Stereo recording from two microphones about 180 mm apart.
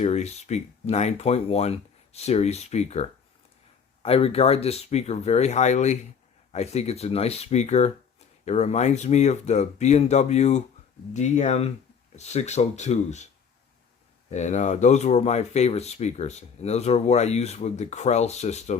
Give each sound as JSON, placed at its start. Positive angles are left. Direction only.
{"t": 0.0, "sound": "speech", "side_deg": 40}
{"t": 14.3, "sound": "speech", "side_deg": 40}